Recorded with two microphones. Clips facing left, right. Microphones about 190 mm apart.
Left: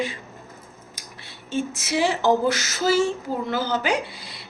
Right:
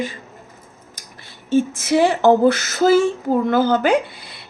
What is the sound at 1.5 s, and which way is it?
A woman's voice, 50° right (ahead or behind).